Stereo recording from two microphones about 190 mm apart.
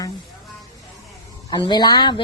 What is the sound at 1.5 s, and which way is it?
Speech, 20° left (ahead or behind).